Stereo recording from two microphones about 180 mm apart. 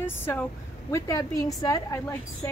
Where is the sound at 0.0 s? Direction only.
10° left (ahead or behind).